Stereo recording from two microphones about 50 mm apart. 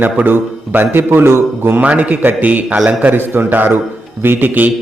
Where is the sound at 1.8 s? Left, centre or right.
Right.